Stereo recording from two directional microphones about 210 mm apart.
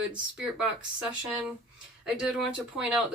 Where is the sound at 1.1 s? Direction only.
5° right (ahead or behind).